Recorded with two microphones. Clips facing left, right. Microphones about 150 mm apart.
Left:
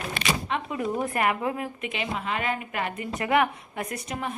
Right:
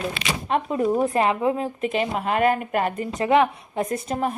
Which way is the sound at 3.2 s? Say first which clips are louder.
Right 5 dB; 25° right (ahead or behind).